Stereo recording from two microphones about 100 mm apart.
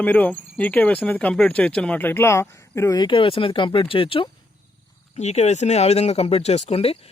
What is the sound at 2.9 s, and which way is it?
Speech, 50° left (ahead or behind).